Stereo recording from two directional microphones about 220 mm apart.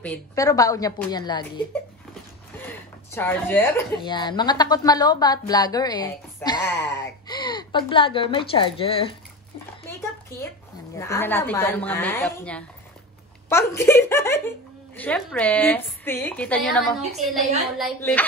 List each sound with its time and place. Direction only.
0.0 s speech: 10° left (ahead or behind)
2.7 s speech: 10° left (ahead or behind)
6.7 s a sound: 50° left (ahead or behind)
7.2 s a woman's voice: 20° left (ahead or behind)
9.8 s a sound: 10° left (ahead or behind)
11.0 s a woman's voice: 10° left (ahead or behind)